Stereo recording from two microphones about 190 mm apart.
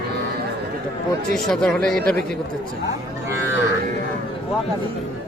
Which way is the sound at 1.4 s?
Centre (ahead or behind).